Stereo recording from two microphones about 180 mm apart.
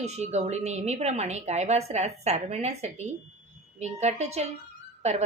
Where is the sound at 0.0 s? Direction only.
40° right (ahead or behind).